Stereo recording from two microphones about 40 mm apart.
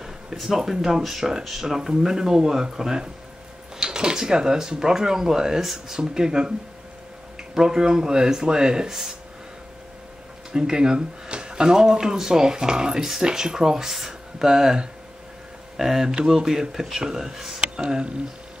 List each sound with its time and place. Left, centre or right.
0.0 s speech: centre
5.9 s speech: centre
10.5 s speech: centre
17.6 s a sound: centre